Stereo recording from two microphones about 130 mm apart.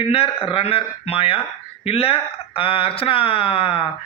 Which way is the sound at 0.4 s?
45° left (ahead or behind).